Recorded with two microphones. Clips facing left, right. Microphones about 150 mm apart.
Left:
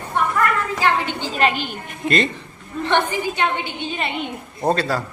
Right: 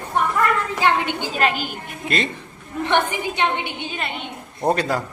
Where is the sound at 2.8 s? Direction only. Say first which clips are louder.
Left 1 dB; 15° right (ahead or behind).